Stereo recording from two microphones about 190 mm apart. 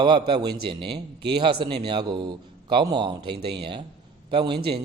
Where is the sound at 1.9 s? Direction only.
25° right (ahead or behind).